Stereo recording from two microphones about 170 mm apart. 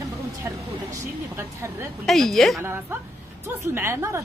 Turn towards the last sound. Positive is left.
turn(degrees=-15)  # may be behind; listen again after turning